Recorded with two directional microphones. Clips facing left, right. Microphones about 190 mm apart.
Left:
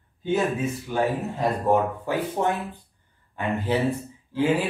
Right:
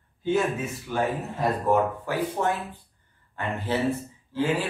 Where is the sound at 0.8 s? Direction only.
20° left (ahead or behind).